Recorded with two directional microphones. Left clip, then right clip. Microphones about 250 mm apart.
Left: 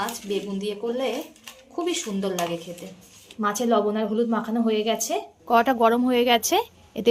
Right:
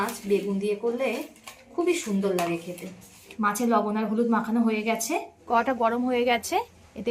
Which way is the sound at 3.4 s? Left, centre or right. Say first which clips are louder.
Left 2 dB; left.